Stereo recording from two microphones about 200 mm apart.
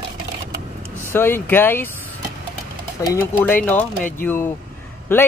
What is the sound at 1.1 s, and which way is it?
Speech, 10° left (ahead or behind).